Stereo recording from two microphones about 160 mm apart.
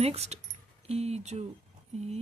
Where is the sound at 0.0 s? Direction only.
40° right (ahead or behind).